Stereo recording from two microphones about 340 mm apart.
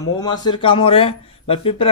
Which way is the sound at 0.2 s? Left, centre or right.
Centre.